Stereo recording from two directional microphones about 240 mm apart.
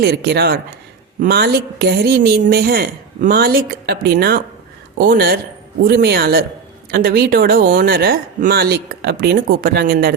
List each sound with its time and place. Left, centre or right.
0.0 s a woman's voice: right